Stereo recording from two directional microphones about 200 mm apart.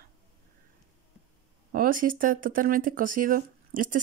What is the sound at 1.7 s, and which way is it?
Speech, 45° right (ahead or behind).